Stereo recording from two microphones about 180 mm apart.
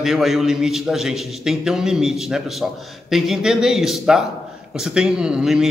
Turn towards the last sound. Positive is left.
turn(degrees=-5)  # may be behind; listen again after turning